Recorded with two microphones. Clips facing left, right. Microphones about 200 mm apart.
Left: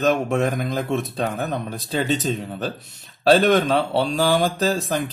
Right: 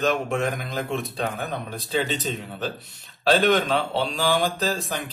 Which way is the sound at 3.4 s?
45° left (ahead or behind).